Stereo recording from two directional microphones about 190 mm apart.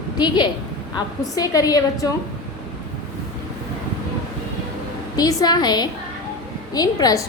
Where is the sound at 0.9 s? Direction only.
20° left (ahead or behind).